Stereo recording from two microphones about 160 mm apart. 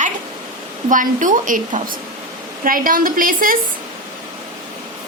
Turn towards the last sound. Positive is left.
turn(degrees=-60)  # may be behind; listen again after turning